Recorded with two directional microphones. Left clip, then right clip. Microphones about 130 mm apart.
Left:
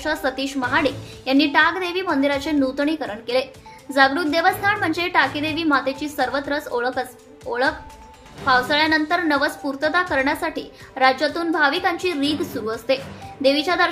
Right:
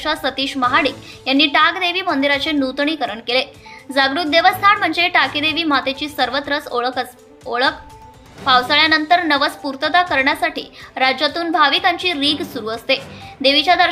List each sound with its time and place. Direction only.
0.0 s a woman's voice: 15° right (ahead or behind)